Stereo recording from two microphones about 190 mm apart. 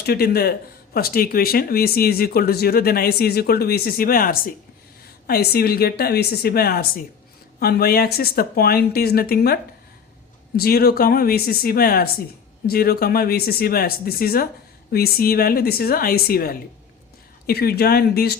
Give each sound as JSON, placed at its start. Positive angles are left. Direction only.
{"t": 0.0, "sound": "speech", "side_deg": 55}
{"t": 10.6, "sound": "speech", "side_deg": 55}